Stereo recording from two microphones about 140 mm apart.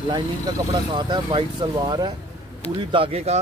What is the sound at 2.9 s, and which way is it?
Speech, 45° right (ahead or behind).